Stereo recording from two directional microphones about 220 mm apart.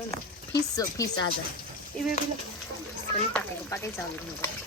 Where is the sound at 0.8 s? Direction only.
15° left (ahead or behind).